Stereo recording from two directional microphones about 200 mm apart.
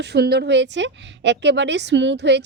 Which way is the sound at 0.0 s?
55° right (ahead or behind).